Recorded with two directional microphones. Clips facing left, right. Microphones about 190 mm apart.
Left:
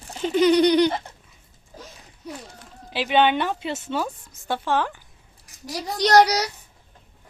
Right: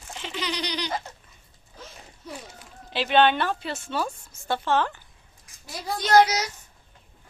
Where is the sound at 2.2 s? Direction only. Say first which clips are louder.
Left 3 dB; 15° left (ahead or behind).